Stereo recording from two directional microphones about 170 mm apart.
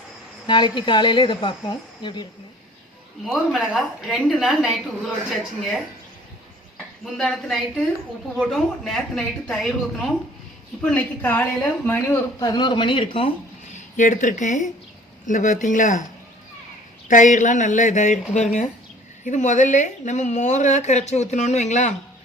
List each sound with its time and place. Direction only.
0.4 s speech: 25° left (ahead or behind)
3.2 s a woman's voice: centre (ahead or behind)
7.0 s a woman's voice: centre (ahead or behind)
10.8 s speech: 10° left (ahead or behind); by 13.3 s 30° left (ahead or behind)
13.7 s a woman's voice: 50° left (ahead or behind)
17.1 s a woman's voice: 50° left (ahead or behind)